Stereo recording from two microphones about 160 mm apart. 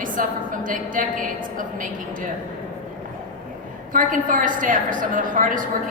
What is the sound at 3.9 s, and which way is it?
A man's voice, 55° right (ahead or behind).